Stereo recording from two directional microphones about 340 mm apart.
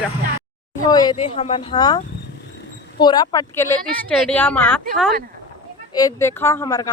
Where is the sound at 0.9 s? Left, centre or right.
Centre.